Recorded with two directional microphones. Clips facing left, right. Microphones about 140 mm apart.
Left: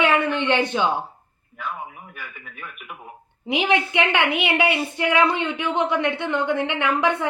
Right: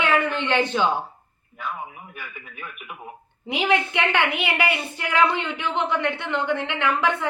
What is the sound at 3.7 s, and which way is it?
A woman's voice, 20° left (ahead or behind).